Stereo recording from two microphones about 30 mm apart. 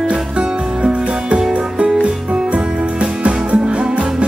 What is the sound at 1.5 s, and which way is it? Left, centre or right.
Music, right.